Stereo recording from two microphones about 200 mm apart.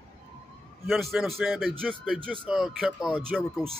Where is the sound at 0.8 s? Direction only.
Centre (ahead or behind).